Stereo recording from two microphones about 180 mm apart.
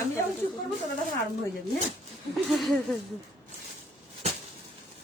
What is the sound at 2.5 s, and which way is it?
Speech, centre (ahead or behind).